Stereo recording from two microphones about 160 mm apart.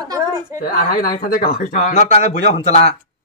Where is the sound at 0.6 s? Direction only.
65° left (ahead or behind); by 2.9 s 40° left (ahead or behind).